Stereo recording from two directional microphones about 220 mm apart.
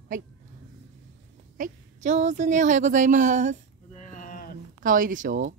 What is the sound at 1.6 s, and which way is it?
A woman's voice, 30° right (ahead or behind).